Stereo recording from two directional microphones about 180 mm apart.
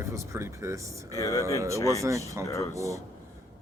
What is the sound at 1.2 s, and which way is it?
Speech, 15° left (ahead or behind).